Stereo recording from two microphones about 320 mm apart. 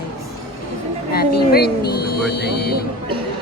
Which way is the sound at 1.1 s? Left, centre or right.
Left.